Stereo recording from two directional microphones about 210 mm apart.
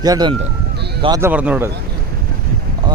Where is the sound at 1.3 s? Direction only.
5° right (ahead or behind).